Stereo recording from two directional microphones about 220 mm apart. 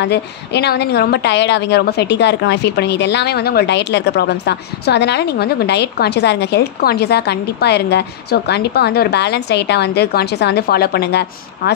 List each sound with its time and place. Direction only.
0.0 s a woman's voice: 50° left (ahead or behind)